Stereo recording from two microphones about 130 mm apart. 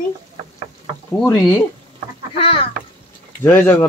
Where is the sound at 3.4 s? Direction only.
15° left (ahead or behind).